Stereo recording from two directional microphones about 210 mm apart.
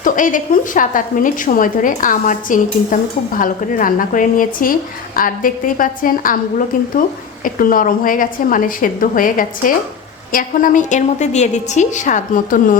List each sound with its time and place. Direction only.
0.0 s a woman's voice: 40° left (ahead or behind)